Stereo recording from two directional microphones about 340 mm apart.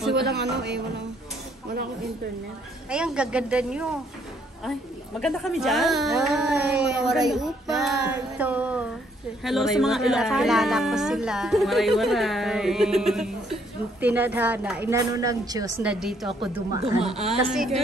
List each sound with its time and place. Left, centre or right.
0.1 s speech: right
2.9 s a woman's voice: centre
5.2 s a woman's voice: centre
16.3 s a woman's voice: centre
17.5 s a woman's voice: centre